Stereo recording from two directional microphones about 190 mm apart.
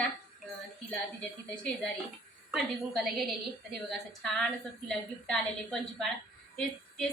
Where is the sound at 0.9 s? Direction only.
5° left (ahead or behind).